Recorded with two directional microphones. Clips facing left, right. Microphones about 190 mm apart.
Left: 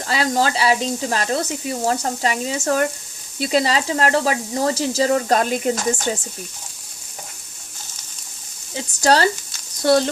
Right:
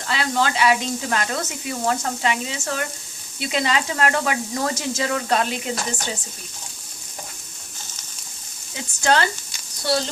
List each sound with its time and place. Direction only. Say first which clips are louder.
0.0 s speech: left 3 dB; 40° left (ahead or behind)
8.7 s speech: left 3 dB; 35° left (ahead or behind)
9.8 s speech: left 7 dB; 50° left (ahead or behind)